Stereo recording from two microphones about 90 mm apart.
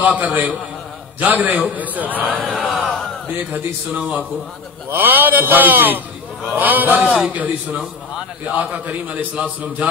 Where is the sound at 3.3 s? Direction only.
20° right (ahead or behind).